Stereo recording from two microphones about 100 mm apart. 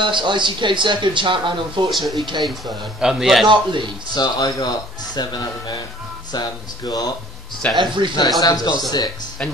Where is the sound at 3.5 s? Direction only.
50° right (ahead or behind).